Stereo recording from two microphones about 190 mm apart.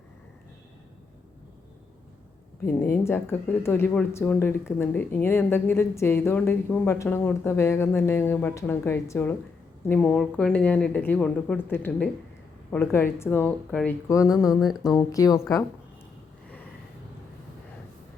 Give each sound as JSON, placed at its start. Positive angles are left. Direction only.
{"t": 2.6, "sound": "speech", "side_deg": 15}
{"t": 14.1, "sound": "speech", "side_deg": 15}
{"t": 14.6, "sound": "speech", "side_deg": 0}
{"t": 14.9, "sound": "speech", "side_deg": 20}